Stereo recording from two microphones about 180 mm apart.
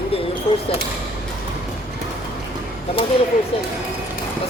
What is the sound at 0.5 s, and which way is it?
Speech, 35° left (ahead or behind).